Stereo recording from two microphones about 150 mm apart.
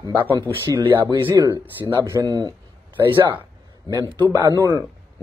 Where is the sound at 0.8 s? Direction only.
30° right (ahead or behind).